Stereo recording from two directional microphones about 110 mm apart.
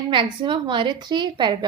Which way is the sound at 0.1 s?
50° right (ahead or behind).